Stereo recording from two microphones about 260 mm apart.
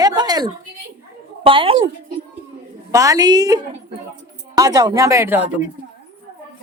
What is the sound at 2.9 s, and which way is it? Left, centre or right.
A woman's voice, centre.